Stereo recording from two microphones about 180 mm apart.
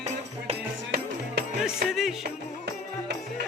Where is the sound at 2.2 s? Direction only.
65° right (ahead or behind).